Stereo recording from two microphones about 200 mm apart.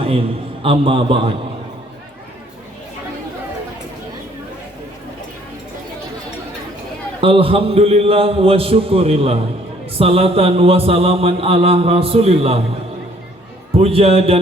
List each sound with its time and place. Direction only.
0.6 s mantra: 25° right (ahead or behind)
7.2 s mantra: 25° right (ahead or behind)
13.7 s mantra: 30° right (ahead or behind)